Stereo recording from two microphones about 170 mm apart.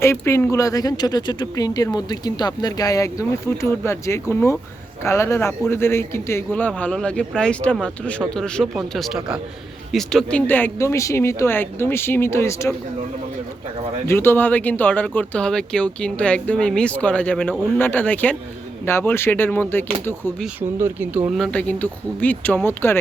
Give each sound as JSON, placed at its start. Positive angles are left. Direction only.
{"t": 0.0, "sound": "speech", "side_deg": 15}
{"t": 14.1, "sound": "speech", "side_deg": 15}
{"t": 20.6, "sound": "speech", "side_deg": -15}
{"t": 21.3, "sound": "speech", "side_deg": 5}